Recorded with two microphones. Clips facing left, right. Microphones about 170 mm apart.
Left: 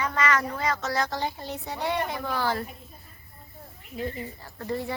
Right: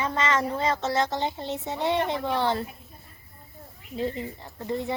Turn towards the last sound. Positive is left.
turn(degrees=-20)  # may be behind; listen again after turning